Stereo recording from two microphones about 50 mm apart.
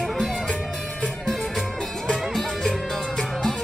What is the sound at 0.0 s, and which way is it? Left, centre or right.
Music, centre.